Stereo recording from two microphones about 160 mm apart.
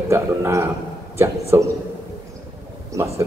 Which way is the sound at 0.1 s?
15° right (ahead or behind).